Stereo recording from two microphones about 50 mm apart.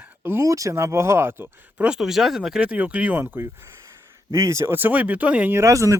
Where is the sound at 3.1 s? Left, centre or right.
Right.